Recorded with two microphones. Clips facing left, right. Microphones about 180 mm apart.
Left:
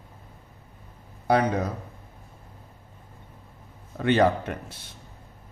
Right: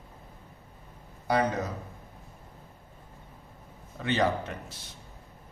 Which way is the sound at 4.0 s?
55° left (ahead or behind).